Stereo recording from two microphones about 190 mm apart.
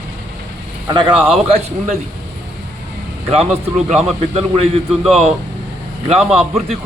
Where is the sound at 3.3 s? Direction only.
30° right (ahead or behind).